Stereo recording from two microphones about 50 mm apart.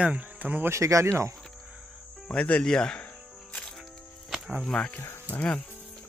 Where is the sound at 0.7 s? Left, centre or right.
Right.